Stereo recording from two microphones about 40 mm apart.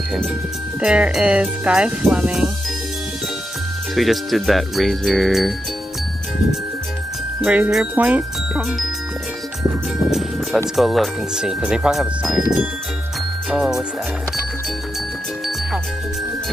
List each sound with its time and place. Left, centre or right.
0.7 s speech: right
3.9 s speech: centre
7.4 s speech: right
10.8 s speech: centre
11.3 s speech: centre